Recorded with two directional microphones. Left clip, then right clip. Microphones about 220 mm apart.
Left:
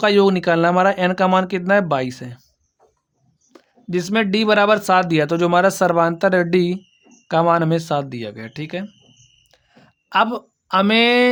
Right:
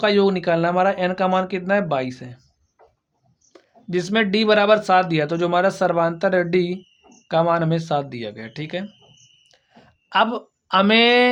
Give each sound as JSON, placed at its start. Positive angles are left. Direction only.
{"t": 0.0, "sound": "speech", "side_deg": 40}
{"t": 3.5, "sound": "speech", "side_deg": 30}
{"t": 9.5, "sound": "a sound", "side_deg": 30}